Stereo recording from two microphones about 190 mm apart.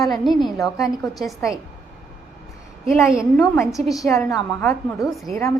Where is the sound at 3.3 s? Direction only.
10° left (ahead or behind).